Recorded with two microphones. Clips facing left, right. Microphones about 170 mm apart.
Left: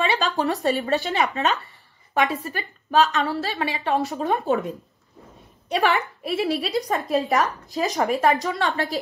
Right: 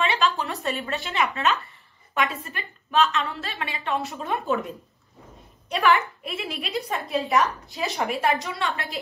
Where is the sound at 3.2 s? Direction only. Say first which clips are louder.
Left 7 dB; 35° left (ahead or behind).